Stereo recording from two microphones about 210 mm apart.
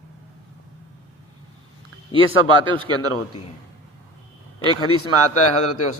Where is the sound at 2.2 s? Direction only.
75° left (ahead or behind).